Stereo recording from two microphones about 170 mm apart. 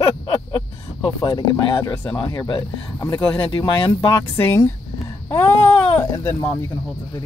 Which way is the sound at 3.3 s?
25° left (ahead or behind).